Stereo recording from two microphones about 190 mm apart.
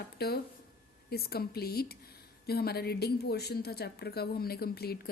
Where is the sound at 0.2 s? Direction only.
55° left (ahead or behind).